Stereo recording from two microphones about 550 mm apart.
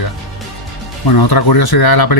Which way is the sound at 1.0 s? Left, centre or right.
Left.